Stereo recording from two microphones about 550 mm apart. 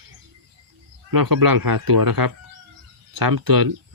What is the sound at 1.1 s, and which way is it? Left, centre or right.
Speech, right.